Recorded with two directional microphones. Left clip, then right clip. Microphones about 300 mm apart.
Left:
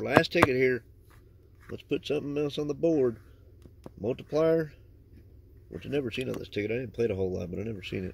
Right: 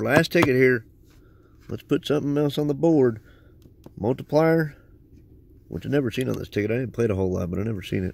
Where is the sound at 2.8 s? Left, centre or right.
Right.